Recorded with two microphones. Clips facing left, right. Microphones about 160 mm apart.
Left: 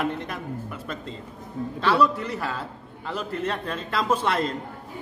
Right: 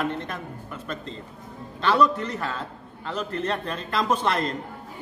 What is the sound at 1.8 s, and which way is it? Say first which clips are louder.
A man's voice: right 1 dB; 5° left (ahead or behind).